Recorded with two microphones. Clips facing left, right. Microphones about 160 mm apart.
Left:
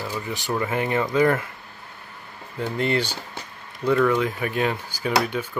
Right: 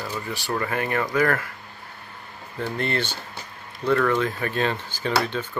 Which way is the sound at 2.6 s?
15° left (ahead or behind).